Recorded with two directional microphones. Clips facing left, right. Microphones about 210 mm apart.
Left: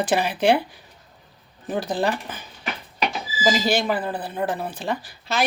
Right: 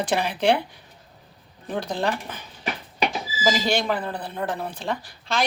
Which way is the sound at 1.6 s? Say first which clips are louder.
Left 2 dB; 5° left (ahead or behind).